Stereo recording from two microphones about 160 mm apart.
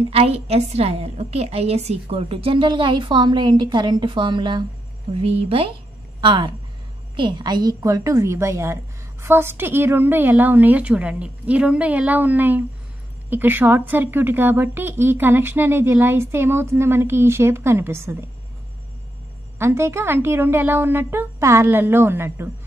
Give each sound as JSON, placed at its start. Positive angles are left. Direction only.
{"t": 0.1, "sound": "a woman's voice", "side_deg": -40}
{"t": 19.6, "sound": "speech", "side_deg": -15}